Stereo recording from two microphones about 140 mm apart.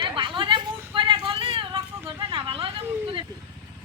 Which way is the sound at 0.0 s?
35° right (ahead or behind).